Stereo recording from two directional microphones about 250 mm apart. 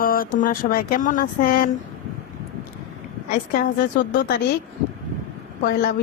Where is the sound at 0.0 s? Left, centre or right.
Left.